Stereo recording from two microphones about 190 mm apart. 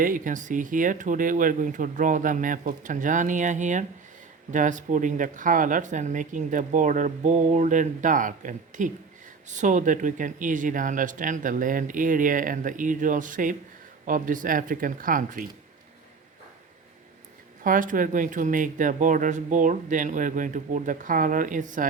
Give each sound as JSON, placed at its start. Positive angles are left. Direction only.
{"t": 0.0, "sound": "speech", "side_deg": -45}
{"t": 17.6, "sound": "speech", "side_deg": -45}